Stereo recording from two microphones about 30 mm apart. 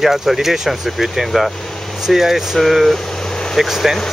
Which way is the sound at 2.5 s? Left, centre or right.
Centre.